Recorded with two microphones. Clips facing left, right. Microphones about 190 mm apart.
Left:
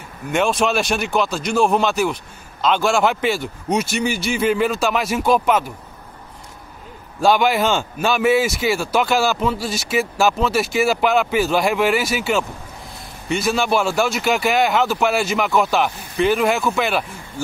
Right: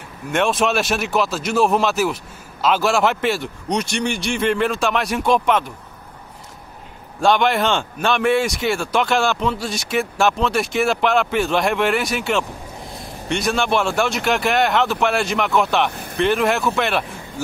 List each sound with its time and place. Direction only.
0.3 s a man's voice: centre (ahead or behind)
7.2 s a man's voice: 5° left (ahead or behind)